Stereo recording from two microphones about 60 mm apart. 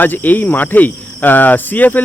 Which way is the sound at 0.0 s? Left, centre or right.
Left.